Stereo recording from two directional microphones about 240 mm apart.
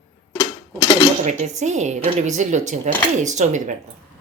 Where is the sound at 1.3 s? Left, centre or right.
Right.